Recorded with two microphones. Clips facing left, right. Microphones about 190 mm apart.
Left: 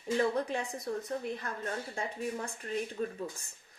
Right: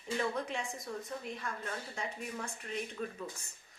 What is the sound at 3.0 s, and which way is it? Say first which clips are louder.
Speech: left 5 dB; 35° left (ahead or behind).